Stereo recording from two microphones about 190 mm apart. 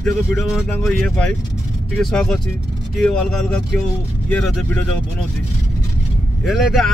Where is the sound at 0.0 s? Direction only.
Centre (ahead or behind).